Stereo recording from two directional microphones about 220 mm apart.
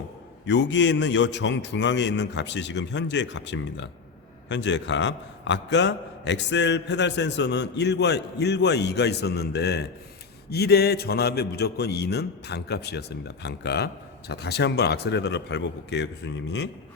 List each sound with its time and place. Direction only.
0.4 s a man's voice: 55° left (ahead or behind)